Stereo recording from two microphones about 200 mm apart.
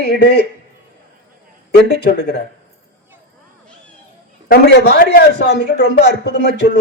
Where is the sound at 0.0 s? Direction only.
55° left (ahead or behind).